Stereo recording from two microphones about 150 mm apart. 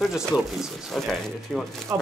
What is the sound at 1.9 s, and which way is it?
Speech, 20° right (ahead or behind).